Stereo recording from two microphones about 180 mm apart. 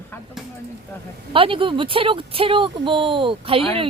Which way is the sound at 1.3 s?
30° right (ahead or behind).